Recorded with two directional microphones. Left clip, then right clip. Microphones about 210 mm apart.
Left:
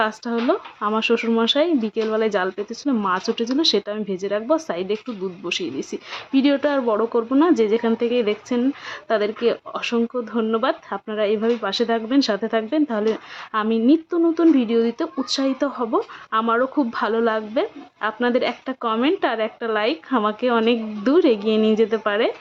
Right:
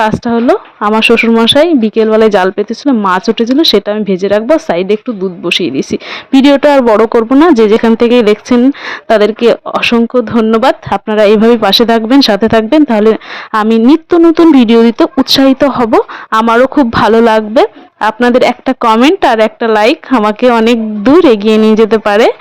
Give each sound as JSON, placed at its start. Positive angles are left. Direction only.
{"t": 0.0, "sound": "speech", "side_deg": -35}